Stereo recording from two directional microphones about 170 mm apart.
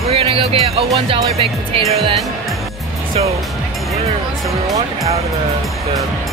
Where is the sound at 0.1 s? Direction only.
35° right (ahead or behind).